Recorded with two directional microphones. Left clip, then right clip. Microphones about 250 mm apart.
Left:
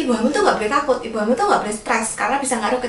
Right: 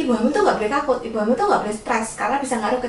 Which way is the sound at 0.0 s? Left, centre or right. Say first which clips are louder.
Left 1 dB; centre.